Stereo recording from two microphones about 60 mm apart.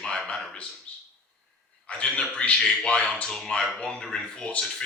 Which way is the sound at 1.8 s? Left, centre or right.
Centre.